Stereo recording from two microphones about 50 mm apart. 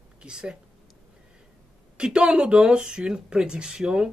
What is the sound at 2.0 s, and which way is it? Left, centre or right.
Speech, centre.